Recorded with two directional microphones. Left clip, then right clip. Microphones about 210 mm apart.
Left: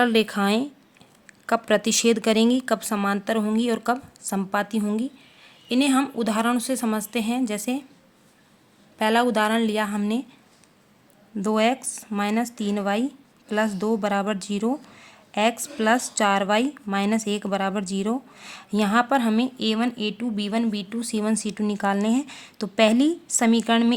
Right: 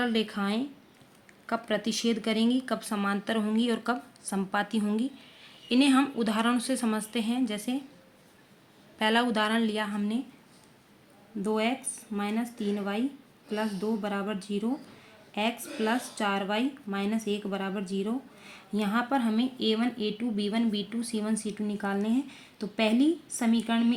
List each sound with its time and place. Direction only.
0.0 s speech: 40° left (ahead or behind)
9.0 s speech: 30° left (ahead or behind)
11.4 s speech: 50° left (ahead or behind)